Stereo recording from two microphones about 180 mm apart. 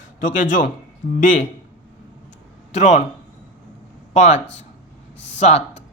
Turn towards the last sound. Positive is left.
turn(degrees=40)  # may be behind; listen again after turning